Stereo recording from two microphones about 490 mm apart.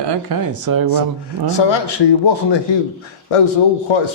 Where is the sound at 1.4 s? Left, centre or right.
Left.